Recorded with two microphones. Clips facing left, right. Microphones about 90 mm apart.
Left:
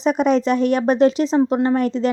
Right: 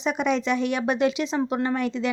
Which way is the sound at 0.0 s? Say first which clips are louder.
Left 7 dB; 40° left (ahead or behind).